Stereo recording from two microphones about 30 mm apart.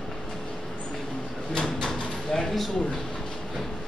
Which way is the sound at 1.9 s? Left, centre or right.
Centre.